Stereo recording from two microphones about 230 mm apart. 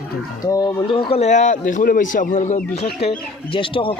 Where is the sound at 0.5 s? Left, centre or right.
Centre.